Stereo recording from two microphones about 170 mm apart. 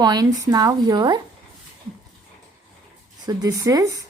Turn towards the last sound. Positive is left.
turn(degrees=-20)  # may be behind; listen again after turning